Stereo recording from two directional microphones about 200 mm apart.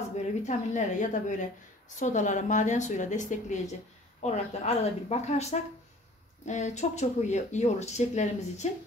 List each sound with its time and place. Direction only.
0.1 s speech: 35° left (ahead or behind)